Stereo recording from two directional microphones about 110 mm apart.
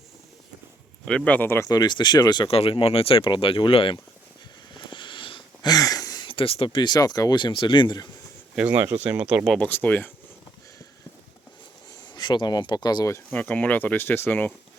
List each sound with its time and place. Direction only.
1.0 s speech: 10° left (ahead or behind)
1.7 s speech: 40° left (ahead or behind)
2.5 s speech: 60° left (ahead or behind)
4.7 s a sound: 45° left (ahead or behind)
5.7 s a sound: 35° left (ahead or behind)
6.2 s speech: 55° left (ahead or behind)
6.8 s speech: 35° left (ahead or behind)
9.0 s speech: 10° right (ahead or behind)
9.6 s speech: 15° left (ahead or behind)
11.9 s speech: 40° left (ahead or behind)
13.3 s speech: 15° left (ahead or behind)